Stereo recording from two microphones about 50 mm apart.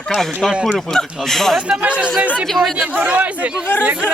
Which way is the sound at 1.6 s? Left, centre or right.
Right.